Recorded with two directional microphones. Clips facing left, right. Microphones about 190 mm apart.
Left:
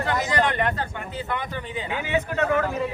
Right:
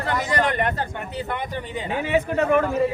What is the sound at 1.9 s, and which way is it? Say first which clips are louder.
Speech: right 4 dB; 25° right (ahead or behind).